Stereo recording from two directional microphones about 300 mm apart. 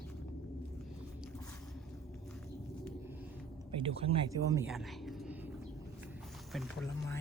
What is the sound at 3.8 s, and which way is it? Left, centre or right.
Speech, centre.